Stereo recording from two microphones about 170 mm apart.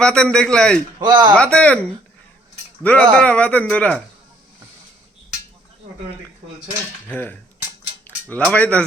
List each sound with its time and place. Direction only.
0.0 s a man's voice: 5° left (ahead or behind)
0.9 s speech: 25° right (ahead or behind)
1.4 s a man's voice: 5° left (ahead or behind)
7.1 s a man's voice: 10° left (ahead or behind)
8.4 s a man's voice: 5° left (ahead or behind)